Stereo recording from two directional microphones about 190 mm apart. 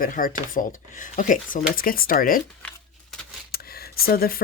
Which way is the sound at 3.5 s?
55° left (ahead or behind).